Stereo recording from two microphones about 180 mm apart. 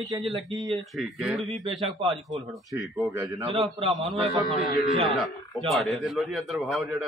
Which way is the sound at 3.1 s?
15° right (ahead or behind).